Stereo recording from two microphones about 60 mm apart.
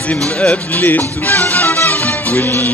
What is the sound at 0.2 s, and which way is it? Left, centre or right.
Speech, centre.